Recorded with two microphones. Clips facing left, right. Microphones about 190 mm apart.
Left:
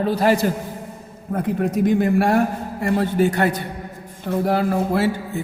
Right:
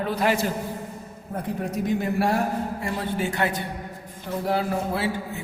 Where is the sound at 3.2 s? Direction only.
40° left (ahead or behind).